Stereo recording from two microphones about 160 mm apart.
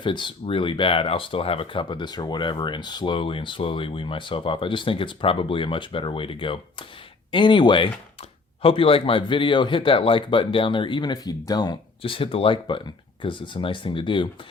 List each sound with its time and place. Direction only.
0.0 s speech: 30° left (ahead or behind)